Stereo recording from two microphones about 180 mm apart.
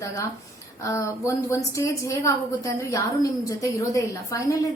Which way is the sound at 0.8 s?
15° left (ahead or behind).